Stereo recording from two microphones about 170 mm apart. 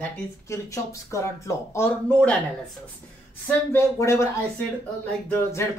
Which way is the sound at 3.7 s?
15° left (ahead or behind).